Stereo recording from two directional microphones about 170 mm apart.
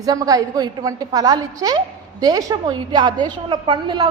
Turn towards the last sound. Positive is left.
turn(degrees=-30)  # may be behind; listen again after turning